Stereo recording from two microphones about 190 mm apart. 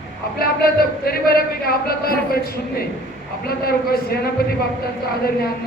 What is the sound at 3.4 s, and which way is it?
A woman's voice, 55° left (ahead or behind).